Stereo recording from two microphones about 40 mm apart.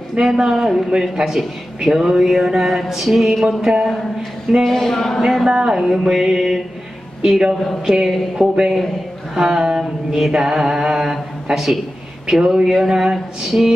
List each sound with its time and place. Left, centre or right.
0.1 s mantra: centre
4.6 s speech: centre
5.2 s mantra: centre
11.5 s a man's voice: centre
12.3 s mantra: centre